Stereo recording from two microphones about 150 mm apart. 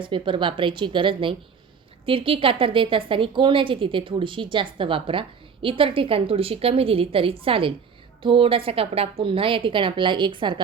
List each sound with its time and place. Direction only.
0.0 s speech: 35° right (ahead or behind)